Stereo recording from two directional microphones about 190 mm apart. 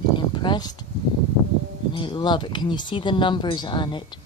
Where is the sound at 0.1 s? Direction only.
25° left (ahead or behind).